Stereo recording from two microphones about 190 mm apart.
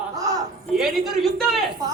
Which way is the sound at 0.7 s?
Centre (ahead or behind).